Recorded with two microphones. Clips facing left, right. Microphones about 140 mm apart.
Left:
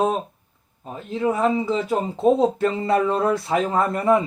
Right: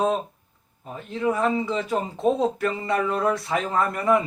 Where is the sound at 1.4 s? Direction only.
Centre (ahead or behind).